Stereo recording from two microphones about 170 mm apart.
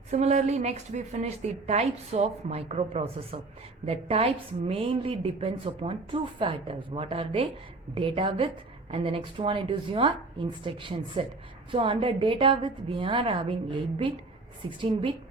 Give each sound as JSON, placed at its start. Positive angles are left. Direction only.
{"t": 0.1, "sound": "a woman's voice", "side_deg": -40}